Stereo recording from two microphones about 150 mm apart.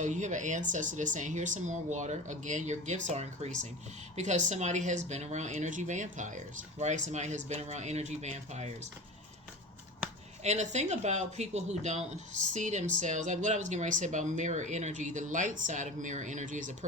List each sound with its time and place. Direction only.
0.0 s speech: 55° right (ahead or behind)
10.4 s speech: 50° right (ahead or behind)